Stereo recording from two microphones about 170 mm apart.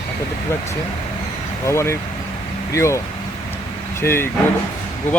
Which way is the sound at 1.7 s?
15° left (ahead or behind).